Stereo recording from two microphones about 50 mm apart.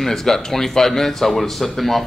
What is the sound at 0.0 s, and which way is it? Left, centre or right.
A man's voice, centre.